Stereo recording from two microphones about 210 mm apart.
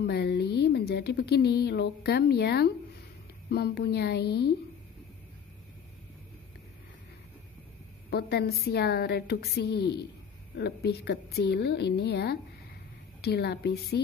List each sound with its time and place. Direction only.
0.0 s a sound: 50° left (ahead or behind)
0.6 s speech: 50° left (ahead or behind)
8.1 s speech: 50° left (ahead or behind)